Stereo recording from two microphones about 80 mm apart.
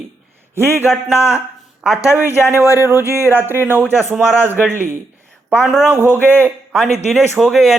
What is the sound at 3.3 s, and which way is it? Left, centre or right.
Speech, right.